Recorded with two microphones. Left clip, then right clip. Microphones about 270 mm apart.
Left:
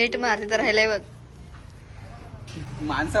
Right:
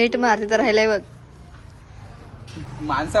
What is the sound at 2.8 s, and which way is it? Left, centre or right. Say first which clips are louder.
Speech: right 3 dB; centre.